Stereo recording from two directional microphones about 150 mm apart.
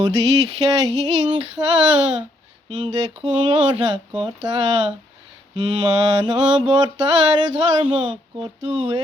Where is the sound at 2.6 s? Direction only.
30° right (ahead or behind).